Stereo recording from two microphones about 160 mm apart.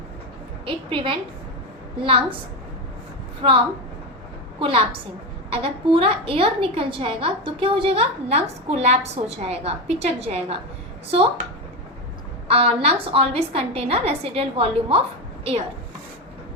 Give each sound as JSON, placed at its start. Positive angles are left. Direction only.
{"t": 0.6, "sound": "a woman's voice", "side_deg": -35}
{"t": 3.4, "sound": "a woman's voice", "side_deg": -35}
{"t": 4.6, "sound": "a woman's voice", "side_deg": -35}
{"t": 12.5, "sound": "a woman's voice", "side_deg": -40}